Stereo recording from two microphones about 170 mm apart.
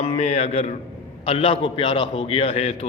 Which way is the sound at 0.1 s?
40° left (ahead or behind).